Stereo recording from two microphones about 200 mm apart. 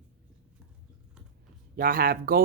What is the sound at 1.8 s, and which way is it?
Speech, 45° right (ahead or behind).